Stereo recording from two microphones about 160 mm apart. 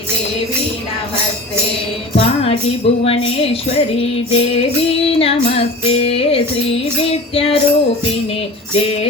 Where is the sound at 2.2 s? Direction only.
35° left (ahead or behind).